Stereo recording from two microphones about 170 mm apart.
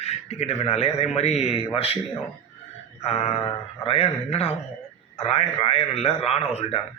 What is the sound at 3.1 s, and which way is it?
A man's voice, 35° left (ahead or behind).